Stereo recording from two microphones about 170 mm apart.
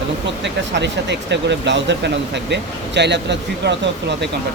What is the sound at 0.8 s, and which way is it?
Speech, 90° right.